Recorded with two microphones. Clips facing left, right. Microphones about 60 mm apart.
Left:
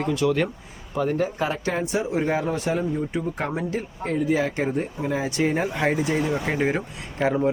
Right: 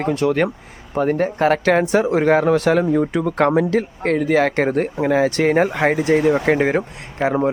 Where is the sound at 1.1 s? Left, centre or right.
Right.